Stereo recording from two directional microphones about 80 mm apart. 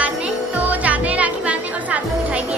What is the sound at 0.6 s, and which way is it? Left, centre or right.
Music, centre.